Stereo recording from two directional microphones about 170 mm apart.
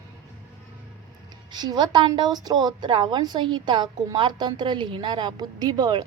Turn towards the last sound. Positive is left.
turn(degrees=-25)  # may be behind; listen again after turning